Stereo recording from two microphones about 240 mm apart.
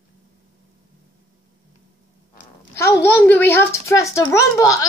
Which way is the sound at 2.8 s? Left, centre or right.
Centre.